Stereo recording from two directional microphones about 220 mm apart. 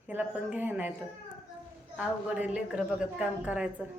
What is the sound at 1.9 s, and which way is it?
A woman's voice, 5° right (ahead or behind).